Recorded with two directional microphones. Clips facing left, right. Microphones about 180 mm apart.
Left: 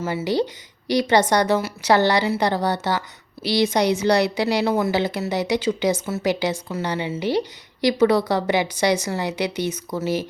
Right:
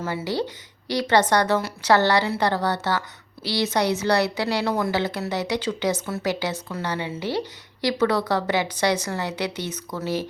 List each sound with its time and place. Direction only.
0.3 s a woman's voice: 15° left (ahead or behind)